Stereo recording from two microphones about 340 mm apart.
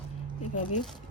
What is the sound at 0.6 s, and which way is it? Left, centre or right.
Speech, left.